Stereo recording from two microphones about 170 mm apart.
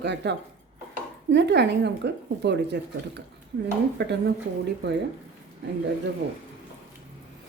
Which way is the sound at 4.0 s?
90° right.